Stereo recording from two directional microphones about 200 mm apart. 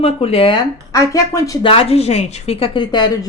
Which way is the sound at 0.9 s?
15° left (ahead or behind).